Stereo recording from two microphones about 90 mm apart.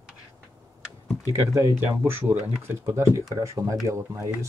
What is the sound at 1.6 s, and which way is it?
Speech, 30° right (ahead or behind).